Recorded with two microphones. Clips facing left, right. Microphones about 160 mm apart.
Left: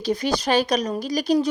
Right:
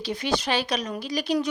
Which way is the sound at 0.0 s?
40° left (ahead or behind).